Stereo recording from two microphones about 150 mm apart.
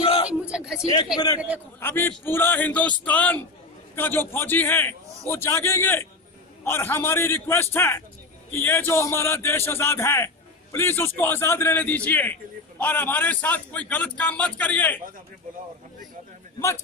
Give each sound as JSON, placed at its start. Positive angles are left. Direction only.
{"t": 0.3, "sound": "a sound", "side_deg": -5}
{"t": 1.1, "sound": "a man's voice", "side_deg": 25}
{"t": 1.8, "sound": "a man's voice", "side_deg": 15}